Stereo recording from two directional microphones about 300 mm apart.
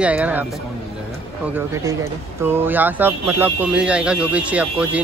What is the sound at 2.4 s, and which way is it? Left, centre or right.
Speech, centre.